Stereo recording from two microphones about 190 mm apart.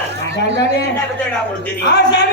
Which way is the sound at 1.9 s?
60° left (ahead or behind).